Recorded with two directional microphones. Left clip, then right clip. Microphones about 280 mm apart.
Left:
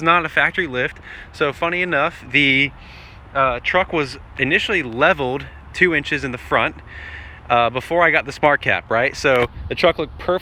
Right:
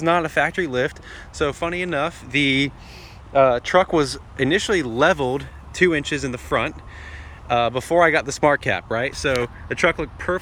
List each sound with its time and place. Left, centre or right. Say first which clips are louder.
0.0 s speech: left 3 dB; centre
3.3 s speech: right 2 dB; right; by 9.5 s centre
9.6 s speech: left 3 dB; centre